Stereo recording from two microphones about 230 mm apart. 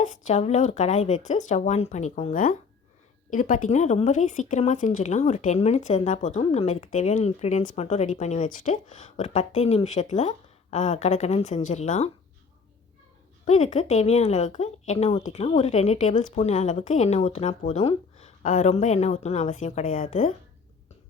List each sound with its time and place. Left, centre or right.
0.0 s speech: left
13.4 s a woman's voice: left